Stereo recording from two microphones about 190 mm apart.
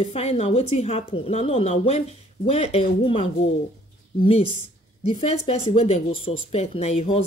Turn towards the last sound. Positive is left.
turn(degrees=30)  # may be behind; listen again after turning